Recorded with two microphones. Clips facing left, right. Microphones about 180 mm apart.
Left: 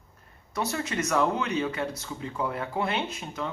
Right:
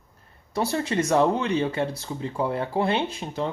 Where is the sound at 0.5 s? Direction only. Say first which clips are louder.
Right 5 dB; 30° right (ahead or behind).